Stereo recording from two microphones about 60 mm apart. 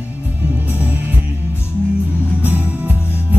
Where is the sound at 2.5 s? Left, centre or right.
Right.